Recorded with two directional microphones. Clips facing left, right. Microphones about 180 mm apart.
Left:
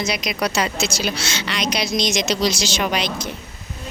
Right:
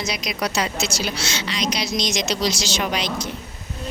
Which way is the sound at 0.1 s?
65° left (ahead or behind).